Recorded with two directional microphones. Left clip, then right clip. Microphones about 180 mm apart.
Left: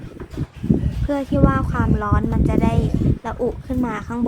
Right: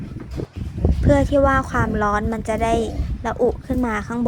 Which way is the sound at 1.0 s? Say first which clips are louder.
Right 5 dB; 15° right (ahead or behind).